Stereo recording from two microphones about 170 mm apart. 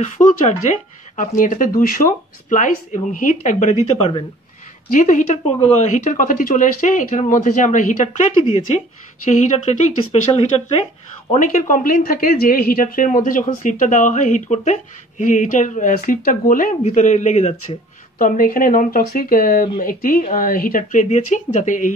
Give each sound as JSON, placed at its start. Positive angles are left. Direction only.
{"t": 0.0, "sound": "speech", "side_deg": 45}
{"t": 4.9, "sound": "speech", "side_deg": 50}
{"t": 11.3, "sound": "speech", "side_deg": 50}
{"t": 18.2, "sound": "speech", "side_deg": 55}